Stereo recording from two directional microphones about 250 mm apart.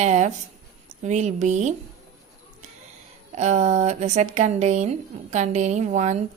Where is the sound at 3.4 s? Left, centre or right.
Right.